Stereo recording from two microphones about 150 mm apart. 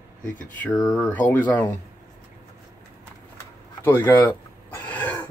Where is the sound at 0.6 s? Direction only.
Centre (ahead or behind).